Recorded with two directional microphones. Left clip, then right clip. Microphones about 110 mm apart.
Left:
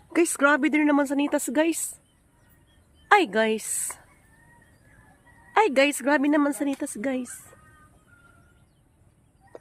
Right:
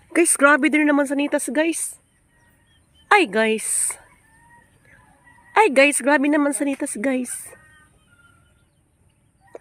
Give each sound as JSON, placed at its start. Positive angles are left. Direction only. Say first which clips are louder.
{"t": 0.1, "sound": "speech", "louder": "right 5 dB", "side_deg": -35}
{"t": 3.1, "sound": "speech", "louder": "right 3 dB", "side_deg": -30}
{"t": 5.5, "sound": "speech", "louder": "right 5 dB", "side_deg": -35}